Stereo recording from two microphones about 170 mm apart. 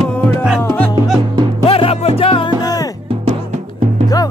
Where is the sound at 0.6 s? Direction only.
5° left (ahead or behind).